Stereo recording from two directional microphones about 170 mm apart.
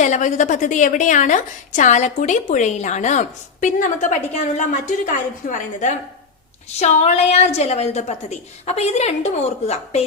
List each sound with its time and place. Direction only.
0.0 s a woman's voice: 45° left (ahead or behind)